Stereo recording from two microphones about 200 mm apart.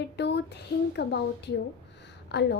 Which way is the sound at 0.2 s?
60° left (ahead or behind).